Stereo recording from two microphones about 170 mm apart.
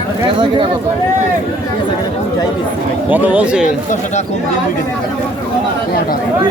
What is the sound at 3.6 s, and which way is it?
Speech, 45° left (ahead or behind).